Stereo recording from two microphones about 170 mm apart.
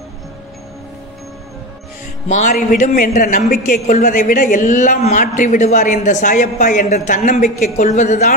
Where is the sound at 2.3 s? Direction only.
45° left (ahead or behind).